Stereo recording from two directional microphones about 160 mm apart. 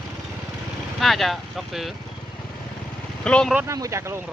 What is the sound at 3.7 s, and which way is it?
Speech, 20° right (ahead or behind).